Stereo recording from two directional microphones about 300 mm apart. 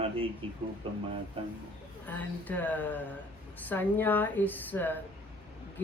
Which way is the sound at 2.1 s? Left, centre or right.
Centre.